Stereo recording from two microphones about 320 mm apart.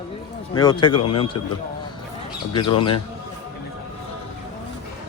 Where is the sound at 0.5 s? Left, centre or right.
Centre.